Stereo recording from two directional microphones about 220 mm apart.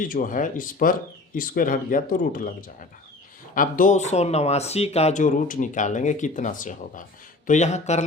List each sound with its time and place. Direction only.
0.0 s speech: 40° left (ahead or behind)